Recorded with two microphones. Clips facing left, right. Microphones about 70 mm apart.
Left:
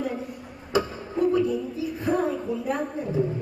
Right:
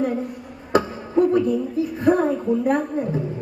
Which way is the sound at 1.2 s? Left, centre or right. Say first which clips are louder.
Right 4 dB; right.